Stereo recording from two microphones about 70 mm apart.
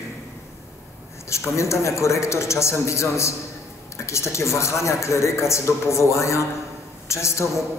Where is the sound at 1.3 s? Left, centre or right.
Left.